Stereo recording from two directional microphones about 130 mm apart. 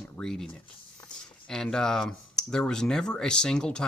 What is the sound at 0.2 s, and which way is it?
Speech, 5° left (ahead or behind).